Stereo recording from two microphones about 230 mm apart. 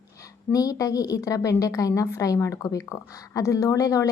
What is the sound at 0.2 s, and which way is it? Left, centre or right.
A woman's voice, centre.